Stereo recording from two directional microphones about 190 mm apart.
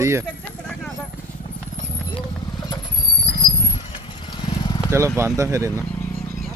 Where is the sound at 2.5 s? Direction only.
20° left (ahead or behind).